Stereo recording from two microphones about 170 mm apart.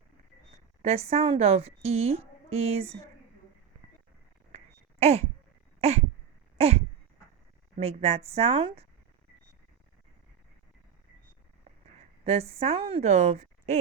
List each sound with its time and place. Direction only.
0.8 s speech: 40° right (ahead or behind)
4.5 s a sound: 35° right (ahead or behind)
7.8 s speech: 35° right (ahead or behind)
12.2 s a woman's voice: 35° right (ahead or behind)